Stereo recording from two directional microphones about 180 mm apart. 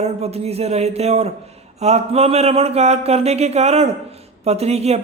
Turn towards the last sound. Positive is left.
turn(degrees=-35)  # may be behind; listen again after turning